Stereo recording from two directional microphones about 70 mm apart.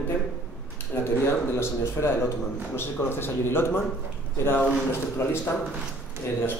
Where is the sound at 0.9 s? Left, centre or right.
Left.